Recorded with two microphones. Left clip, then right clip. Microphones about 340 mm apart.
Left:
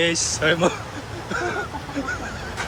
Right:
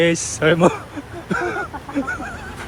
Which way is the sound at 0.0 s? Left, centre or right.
Centre.